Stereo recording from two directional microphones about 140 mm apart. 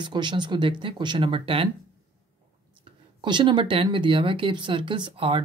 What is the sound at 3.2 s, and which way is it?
Speech, 35° right (ahead or behind).